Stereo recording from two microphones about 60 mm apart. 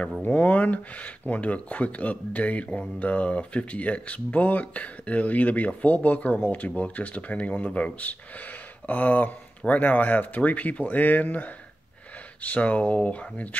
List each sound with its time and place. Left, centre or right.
0.2 s speech: left